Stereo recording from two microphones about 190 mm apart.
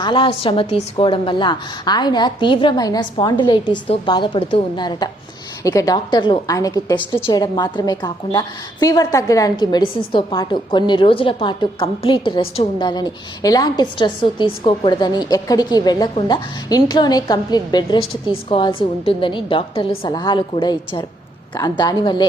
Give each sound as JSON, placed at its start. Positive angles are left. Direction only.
{"t": 0.0, "sound": "a woman's voice", "side_deg": 25}